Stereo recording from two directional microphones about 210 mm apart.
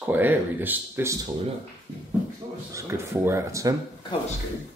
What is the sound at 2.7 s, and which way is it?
Speech, 10° right (ahead or behind).